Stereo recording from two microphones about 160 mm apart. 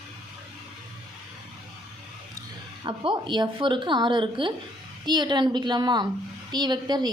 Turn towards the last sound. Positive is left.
turn(degrees=-25)  # may be behind; listen again after turning